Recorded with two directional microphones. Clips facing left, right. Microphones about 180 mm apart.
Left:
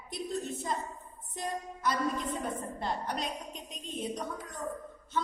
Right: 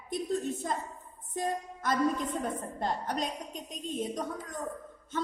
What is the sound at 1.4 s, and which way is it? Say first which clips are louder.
Music: right 4 dB; 50° right (ahead or behind).